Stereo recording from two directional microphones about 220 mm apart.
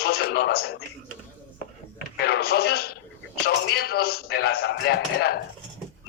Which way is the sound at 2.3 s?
45° left (ahead or behind).